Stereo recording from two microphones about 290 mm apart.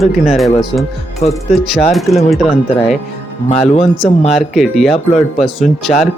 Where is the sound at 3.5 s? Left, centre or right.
Centre.